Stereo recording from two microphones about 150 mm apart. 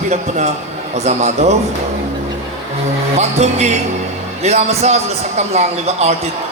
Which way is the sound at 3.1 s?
45° right (ahead or behind).